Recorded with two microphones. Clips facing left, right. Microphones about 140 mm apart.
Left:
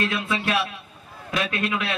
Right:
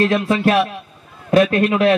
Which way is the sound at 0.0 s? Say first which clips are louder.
Right 10 dB; 40° right (ahead or behind).